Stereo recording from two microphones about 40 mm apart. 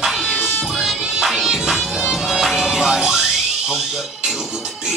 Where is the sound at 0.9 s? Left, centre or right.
Centre.